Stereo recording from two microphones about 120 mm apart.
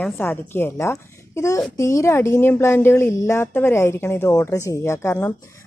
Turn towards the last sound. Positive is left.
turn(degrees=20)  # may be behind; listen again after turning